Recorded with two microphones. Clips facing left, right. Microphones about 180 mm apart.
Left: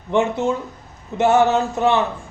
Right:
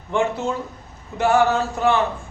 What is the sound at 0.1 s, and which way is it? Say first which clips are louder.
Speech: left 3 dB; 20° left (ahead or behind).